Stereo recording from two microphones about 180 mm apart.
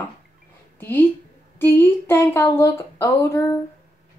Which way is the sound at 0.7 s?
10° left (ahead or behind).